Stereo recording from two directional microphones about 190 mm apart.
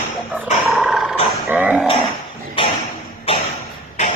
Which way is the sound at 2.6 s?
25° left (ahead or behind).